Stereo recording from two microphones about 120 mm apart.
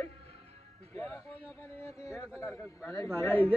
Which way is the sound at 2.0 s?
25° left (ahead or behind).